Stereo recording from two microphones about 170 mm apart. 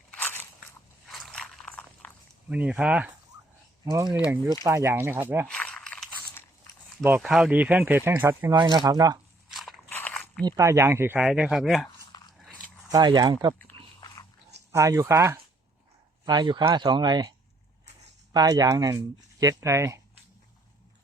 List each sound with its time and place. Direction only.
0.1 s biting: 10° left (ahead or behind)
1.0 s a sound: 5° left (ahead or behind)
2.5 s speech: 5° right (ahead or behind)
3.8 s speech: 20° right (ahead or behind)
5.5 s crumpling: 5° left (ahead or behind)
7.2 s speech: centre (ahead or behind)
8.5 s speech: 25° right (ahead or behind)
9.5 s biting: centre (ahead or behind)
9.9 s walk: 5° left (ahead or behind)
10.4 s speech: 15° right (ahead or behind); by 11.9 s centre (ahead or behind)
11.9 s biting: 25° left (ahead or behind)
12.9 s speech: 25° right (ahead or behind)
14.7 s speech: 20° right (ahead or behind)
18.3 s speech: 20° right (ahead or behind)